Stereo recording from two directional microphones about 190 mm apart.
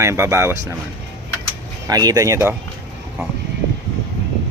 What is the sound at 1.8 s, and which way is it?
Speech, 20° right (ahead or behind).